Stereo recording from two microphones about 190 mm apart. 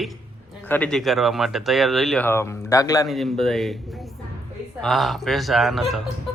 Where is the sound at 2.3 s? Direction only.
15° left (ahead or behind).